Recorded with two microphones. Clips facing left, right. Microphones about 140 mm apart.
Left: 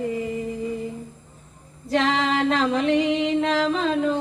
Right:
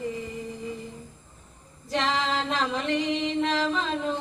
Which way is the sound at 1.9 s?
65° left (ahead or behind).